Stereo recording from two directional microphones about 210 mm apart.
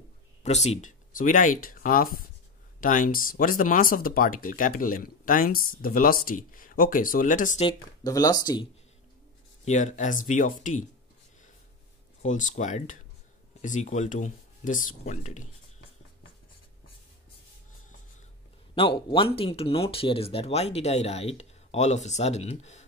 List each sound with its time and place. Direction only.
0.4 s speech: 30° left (ahead or behind)
7.6 s speech: 15° left (ahead or behind)
9.7 s speech: 35° left (ahead or behind)
12.2 s speech: 35° left (ahead or behind)
18.8 s speech: 25° left (ahead or behind)